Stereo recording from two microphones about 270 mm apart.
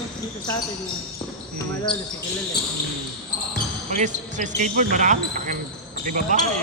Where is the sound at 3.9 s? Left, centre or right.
Right.